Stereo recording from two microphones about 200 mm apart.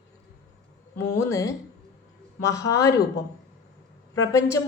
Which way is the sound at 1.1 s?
15° left (ahead or behind).